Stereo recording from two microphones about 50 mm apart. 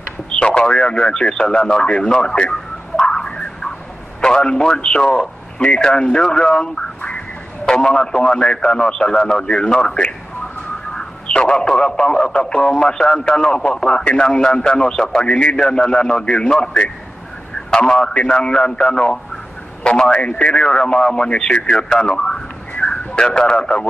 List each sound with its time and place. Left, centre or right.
0.4 s speech: left
3.0 s a sound: centre
4.2 s a man's voice: centre
22.8 s radio: centre